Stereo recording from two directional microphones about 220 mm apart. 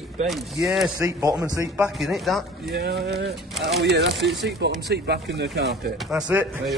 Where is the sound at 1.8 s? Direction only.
Centre (ahead or behind).